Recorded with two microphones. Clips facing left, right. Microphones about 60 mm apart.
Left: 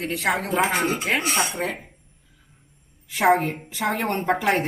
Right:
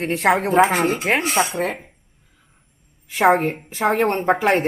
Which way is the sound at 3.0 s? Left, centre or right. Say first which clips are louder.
Right 3 dB; right.